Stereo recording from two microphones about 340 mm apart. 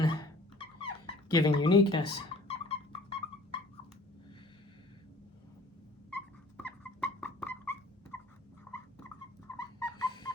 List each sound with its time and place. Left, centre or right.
0.0 s a sound: centre
6.6 s dog: centre
9.6 s dog: centre